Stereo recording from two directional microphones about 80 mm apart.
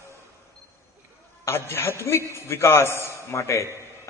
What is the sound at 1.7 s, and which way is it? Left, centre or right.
A man's voice, left.